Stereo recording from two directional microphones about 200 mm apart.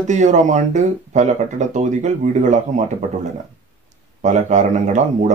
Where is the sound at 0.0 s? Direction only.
35° right (ahead or behind).